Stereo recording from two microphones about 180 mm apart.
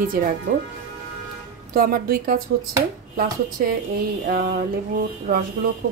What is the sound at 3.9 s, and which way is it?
Speech, 55° right (ahead or behind).